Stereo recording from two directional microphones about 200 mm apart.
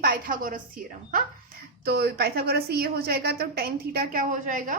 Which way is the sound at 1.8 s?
50° right (ahead or behind).